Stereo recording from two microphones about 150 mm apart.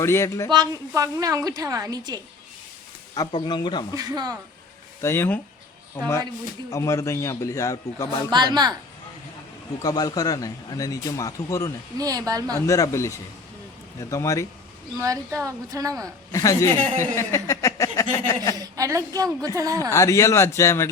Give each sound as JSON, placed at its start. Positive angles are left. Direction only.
{"t": 0.0, "sound": "a man's voice", "side_deg": 20}
{"t": 0.5, "sound": "a woman's voice", "side_deg": -25}
{"t": 3.2, "sound": "speech", "side_deg": 30}
{"t": 3.9, "sound": "a woman's voice", "side_deg": -25}
{"t": 4.9, "sound": "a man's voice", "side_deg": 15}
{"t": 8.3, "sound": "a woman's voice", "side_deg": -30}
{"t": 9.8, "sound": "speech", "side_deg": 25}
{"t": 11.9, "sound": "a woman's voice", "side_deg": -25}
{"t": 12.5, "sound": "speech", "side_deg": 20}
{"t": 14.9, "sound": "a woman's voice", "side_deg": -20}
{"t": 16.3, "sound": "speech", "side_deg": 20}
{"t": 18.5, "sound": "a woman's voice", "side_deg": -25}
{"t": 19.9, "sound": "speech", "side_deg": 20}